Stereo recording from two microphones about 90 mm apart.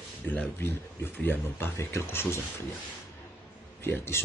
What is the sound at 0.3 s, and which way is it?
A man's voice, 20° left (ahead or behind).